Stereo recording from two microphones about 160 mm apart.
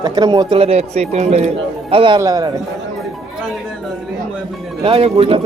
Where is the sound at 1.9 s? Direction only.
30° right (ahead or behind).